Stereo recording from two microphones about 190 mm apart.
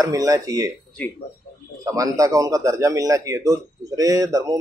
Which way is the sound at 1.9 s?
20° right (ahead or behind).